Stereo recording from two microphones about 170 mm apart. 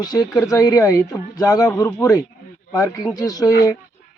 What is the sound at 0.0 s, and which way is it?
Speech, 20° left (ahead or behind).